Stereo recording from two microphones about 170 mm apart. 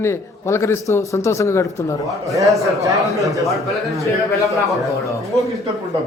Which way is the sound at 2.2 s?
20° right (ahead or behind).